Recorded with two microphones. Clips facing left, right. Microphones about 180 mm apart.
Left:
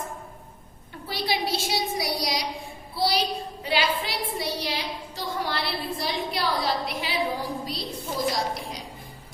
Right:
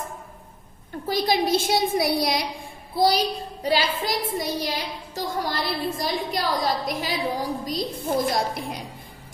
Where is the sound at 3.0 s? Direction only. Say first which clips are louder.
Right 4 dB; 45° right (ahead or behind).